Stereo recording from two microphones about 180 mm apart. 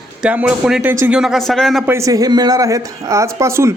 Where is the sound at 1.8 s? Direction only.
15° right (ahead or behind).